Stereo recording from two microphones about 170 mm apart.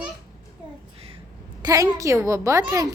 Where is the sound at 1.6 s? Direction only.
20° right (ahead or behind).